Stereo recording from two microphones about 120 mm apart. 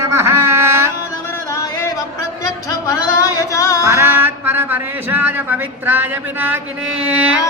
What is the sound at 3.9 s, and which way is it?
A man's voice, 20° right (ahead or behind).